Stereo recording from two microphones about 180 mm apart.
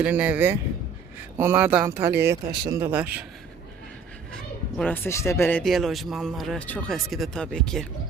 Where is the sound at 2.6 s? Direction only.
15° right (ahead or behind).